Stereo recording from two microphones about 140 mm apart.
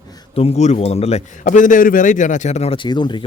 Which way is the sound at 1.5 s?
65° left (ahead or behind).